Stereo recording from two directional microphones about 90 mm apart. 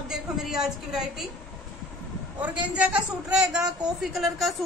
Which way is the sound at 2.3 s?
15° right (ahead or behind).